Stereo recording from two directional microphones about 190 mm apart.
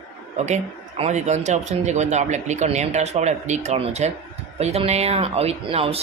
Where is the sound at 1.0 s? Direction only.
35° right (ahead or behind).